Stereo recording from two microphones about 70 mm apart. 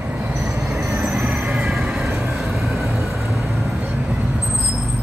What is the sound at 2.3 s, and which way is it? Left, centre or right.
Vehicle, centre.